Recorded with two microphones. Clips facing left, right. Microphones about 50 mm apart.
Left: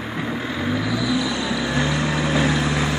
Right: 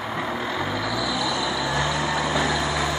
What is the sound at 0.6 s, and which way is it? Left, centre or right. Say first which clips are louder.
Vehicle: left 3 dB; left.